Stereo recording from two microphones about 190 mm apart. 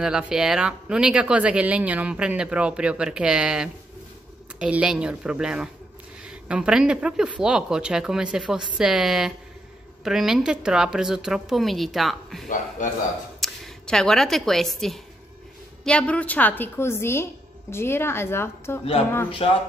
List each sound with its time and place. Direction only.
0.0 s speech: 5° right (ahead or behind)
12.4 s a man's voice: 45° left (ahead or behind)
13.4 s a woman's voice: 5° left (ahead or behind)
19.4 s speech: 30° left (ahead or behind)